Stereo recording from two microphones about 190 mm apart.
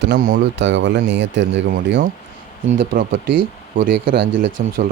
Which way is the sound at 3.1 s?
65° right (ahead or behind).